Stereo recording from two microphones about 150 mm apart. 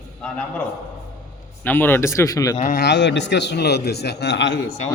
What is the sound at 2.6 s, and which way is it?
Speech, 70° left (ahead or behind).